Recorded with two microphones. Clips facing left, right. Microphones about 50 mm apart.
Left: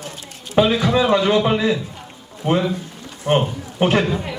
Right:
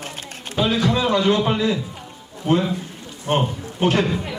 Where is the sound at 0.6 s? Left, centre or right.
Left.